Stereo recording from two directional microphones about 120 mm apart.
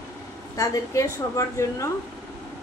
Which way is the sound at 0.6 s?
25° left (ahead or behind).